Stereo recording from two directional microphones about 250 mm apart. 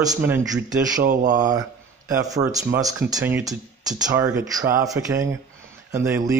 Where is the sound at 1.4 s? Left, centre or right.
Centre.